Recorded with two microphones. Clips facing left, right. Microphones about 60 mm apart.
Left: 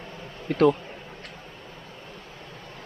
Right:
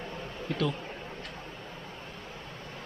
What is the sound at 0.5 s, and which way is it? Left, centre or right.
Speech, left.